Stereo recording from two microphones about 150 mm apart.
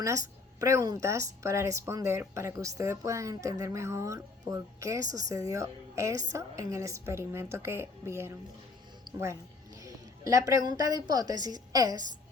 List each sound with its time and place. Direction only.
0.0 s a woman's voice: 20° right (ahead or behind)